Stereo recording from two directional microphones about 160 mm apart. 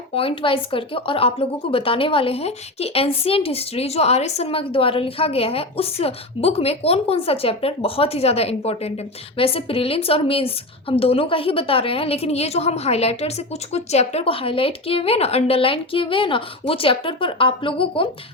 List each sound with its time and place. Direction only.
0.1 s a woman's voice: 35° left (ahead or behind)